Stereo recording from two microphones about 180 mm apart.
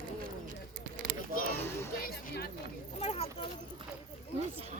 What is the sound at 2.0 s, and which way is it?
Music, 60° left (ahead or behind).